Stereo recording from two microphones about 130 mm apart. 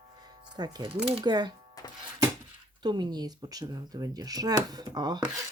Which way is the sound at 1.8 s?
30° left (ahead or behind).